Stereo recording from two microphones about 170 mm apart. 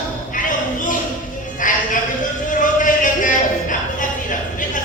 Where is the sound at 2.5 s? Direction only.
50° left (ahead or behind).